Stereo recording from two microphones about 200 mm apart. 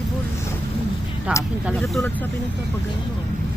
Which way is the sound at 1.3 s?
5° right (ahead or behind).